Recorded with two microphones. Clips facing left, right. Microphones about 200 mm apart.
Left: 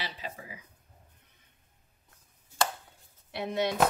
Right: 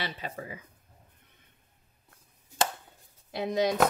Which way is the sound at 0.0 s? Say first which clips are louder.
Right 4 dB; 55° right (ahead or behind).